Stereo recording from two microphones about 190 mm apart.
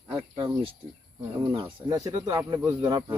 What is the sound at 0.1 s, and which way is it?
Cricket, 25° right (ahead or behind).